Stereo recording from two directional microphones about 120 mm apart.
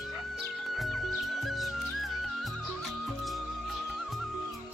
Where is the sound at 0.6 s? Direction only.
Centre (ahead or behind).